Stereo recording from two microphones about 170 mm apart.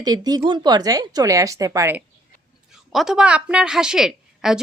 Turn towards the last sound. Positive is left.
turn(degrees=-5)  # may be behind; listen again after turning